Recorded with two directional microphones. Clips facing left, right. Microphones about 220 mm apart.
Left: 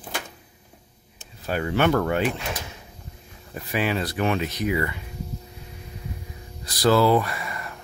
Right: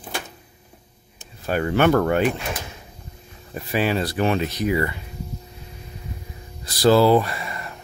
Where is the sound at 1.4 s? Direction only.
50° right (ahead or behind).